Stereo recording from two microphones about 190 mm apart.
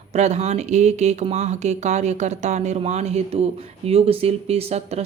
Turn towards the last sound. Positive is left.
turn(degrees=-35)  # may be behind; listen again after turning